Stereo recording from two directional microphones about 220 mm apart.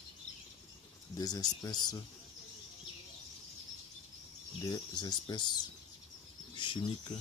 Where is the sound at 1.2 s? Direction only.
15° left (ahead or behind).